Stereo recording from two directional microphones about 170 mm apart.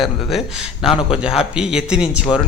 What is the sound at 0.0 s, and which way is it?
Speech, centre (ahead or behind).